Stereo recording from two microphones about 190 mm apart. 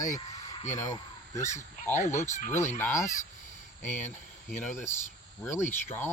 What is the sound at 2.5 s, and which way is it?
Speech, 15° left (ahead or behind).